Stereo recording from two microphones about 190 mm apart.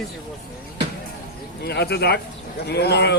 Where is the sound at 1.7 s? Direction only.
60° left (ahead or behind).